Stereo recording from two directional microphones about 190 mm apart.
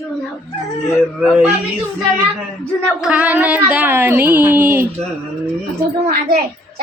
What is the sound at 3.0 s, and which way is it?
Speech, 5° right (ahead or behind).